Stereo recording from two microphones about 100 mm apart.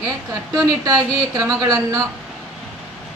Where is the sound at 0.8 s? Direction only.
40° right (ahead or behind).